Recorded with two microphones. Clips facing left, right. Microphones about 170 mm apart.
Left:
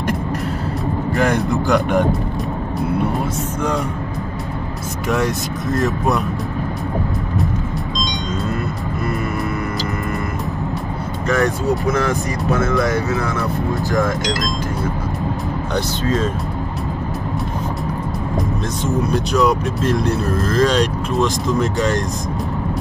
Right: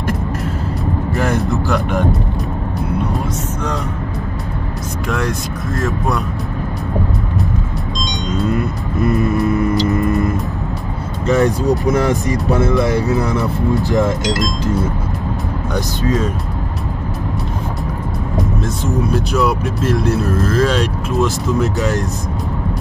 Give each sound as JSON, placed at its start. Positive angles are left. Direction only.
{"t": 1.1, "sound": "speech", "side_deg": -5}
{"t": 5.1, "sound": "speech", "side_deg": 0}
{"t": 9.0, "sound": "music", "side_deg": -20}
{"t": 11.2, "sound": "speech", "side_deg": -25}
{"t": 15.7, "sound": "speech", "side_deg": -10}
{"t": 19.0, "sound": "speech", "side_deg": -5}